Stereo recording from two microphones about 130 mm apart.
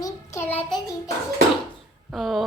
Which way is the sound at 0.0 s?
20° left (ahead or behind).